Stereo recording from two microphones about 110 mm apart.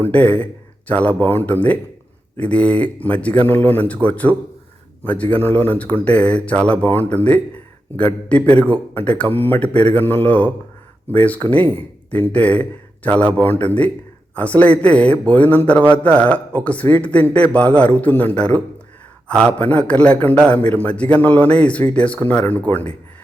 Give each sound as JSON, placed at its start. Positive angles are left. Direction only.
{"t": 0.0, "sound": "speech", "side_deg": 15}